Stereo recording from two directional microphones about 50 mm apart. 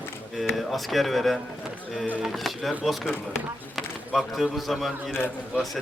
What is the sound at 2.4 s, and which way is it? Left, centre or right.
Speech, centre.